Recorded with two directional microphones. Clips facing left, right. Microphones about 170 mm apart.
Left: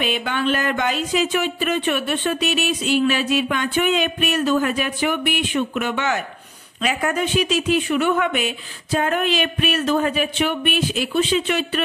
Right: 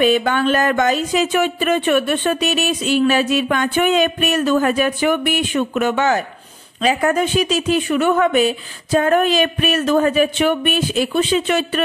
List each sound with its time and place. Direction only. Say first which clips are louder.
0.0 s speech: right 7 dB; 45° right (ahead or behind)